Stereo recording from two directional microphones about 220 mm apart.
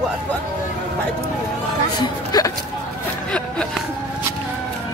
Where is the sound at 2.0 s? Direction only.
15° left (ahead or behind).